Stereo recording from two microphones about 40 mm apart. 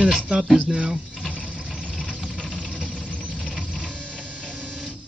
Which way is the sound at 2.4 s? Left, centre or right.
Left.